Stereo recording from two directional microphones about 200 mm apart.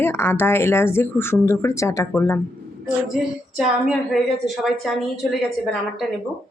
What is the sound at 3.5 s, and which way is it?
A woman's voice, centre (ahead or behind).